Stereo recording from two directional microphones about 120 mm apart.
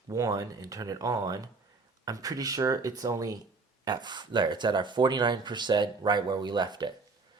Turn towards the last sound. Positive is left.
turn(degrees=-35)  # may be behind; listen again after turning